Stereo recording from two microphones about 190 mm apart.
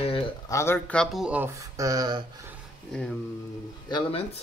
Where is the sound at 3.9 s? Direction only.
30° left (ahead or behind).